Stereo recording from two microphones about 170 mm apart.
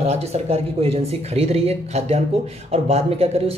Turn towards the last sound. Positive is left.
turn(degrees=-35)  # may be behind; listen again after turning